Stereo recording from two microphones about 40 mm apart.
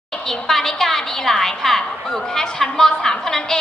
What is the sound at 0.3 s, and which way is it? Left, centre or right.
A woman's voice, centre.